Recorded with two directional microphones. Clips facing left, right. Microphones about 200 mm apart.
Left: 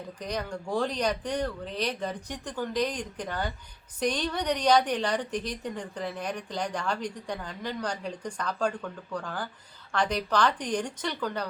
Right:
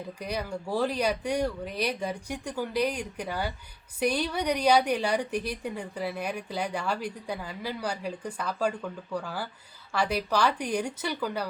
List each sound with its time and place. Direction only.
0.2 s a woman's voice: 10° right (ahead or behind)